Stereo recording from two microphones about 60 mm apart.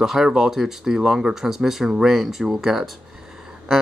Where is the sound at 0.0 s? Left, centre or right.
Centre.